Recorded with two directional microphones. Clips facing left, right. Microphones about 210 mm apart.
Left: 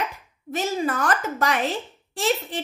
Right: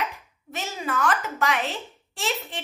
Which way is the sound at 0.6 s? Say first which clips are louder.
Left 4 dB; 45° left (ahead or behind).